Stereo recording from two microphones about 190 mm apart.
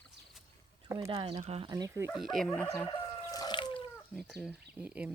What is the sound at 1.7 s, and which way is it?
Speech, 15° right (ahead or behind).